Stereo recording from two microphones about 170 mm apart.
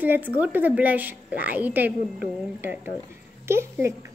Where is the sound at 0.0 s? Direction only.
10° right (ahead or behind).